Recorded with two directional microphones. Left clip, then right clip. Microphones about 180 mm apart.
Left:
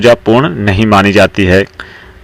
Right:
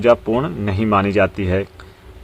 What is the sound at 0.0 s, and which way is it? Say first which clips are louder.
Speech: left 8 dB; 35° left (ahead or behind).